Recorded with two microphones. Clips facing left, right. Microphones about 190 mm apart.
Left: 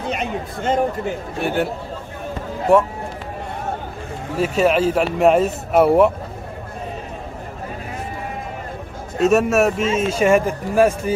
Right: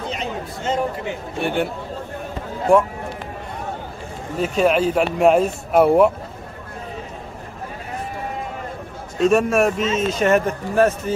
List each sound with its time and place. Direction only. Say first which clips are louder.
0.1 s a sound: left 3 dB; 55° left (ahead or behind)
1.4 s speech: left 1 dB; centre (ahead or behind)
2.7 s speech: left 1 dB; 5° left (ahead or behind)
4.4 s speech: left 1 dB; 5° left (ahead or behind)
9.2 s speech: left 1 dB; 5° left (ahead or behind)